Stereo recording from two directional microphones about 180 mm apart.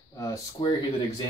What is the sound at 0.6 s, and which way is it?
Speech, 30° left (ahead or behind).